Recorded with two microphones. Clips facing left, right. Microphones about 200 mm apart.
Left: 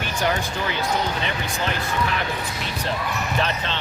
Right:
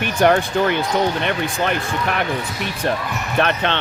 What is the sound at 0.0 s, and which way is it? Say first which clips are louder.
Speech: right 8 dB; 55° right (ahead or behind).